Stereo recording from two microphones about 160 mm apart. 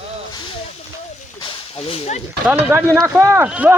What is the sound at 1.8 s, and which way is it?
Speech, 40° left (ahead or behind).